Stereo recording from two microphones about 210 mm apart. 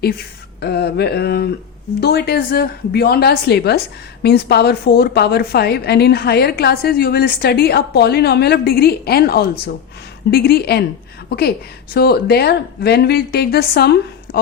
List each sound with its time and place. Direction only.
0.6 s a woman's voice: 50° left (ahead or behind)